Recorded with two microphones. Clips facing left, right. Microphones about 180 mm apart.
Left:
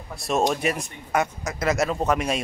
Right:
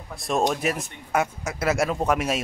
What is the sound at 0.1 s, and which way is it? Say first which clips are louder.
Speech: left 1 dB; centre (ahead or behind).